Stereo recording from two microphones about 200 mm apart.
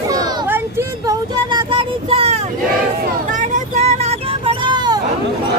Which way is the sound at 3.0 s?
40° right (ahead or behind).